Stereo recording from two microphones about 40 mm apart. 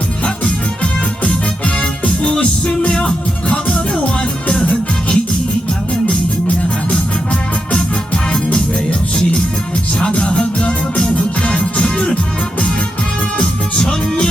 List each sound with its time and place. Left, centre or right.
2.4 s music: left
4.2 s music: left
10.0 s music: left
13.4 s music: centre